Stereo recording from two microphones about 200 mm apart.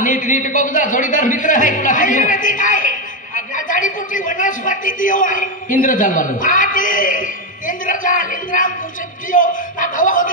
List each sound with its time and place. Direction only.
0.0 s a man's voice: 40° left (ahead or behind)